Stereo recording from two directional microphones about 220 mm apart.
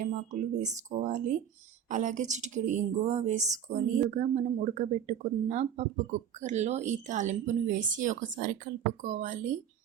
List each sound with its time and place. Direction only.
0.0 s speech: 35° right (ahead or behind)